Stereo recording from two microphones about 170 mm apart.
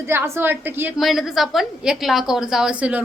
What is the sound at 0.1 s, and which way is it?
Speech, 15° right (ahead or behind).